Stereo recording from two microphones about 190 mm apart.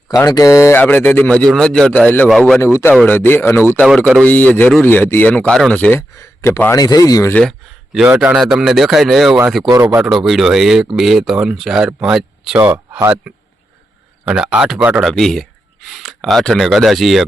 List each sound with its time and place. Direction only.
0.1 s speech: 20° left (ahead or behind)
3.8 s speech: centre (ahead or behind)
7.9 s speech: 5° right (ahead or behind)
9.6 s speech: 20° right (ahead or behind)
10.0 s speech: centre (ahead or behind)